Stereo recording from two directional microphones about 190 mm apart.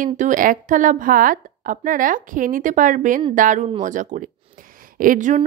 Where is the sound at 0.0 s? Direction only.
45° right (ahead or behind).